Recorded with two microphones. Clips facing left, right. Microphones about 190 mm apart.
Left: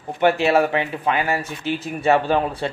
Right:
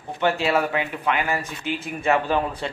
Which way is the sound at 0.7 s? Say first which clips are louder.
Left 3 dB; 35° left (ahead or behind).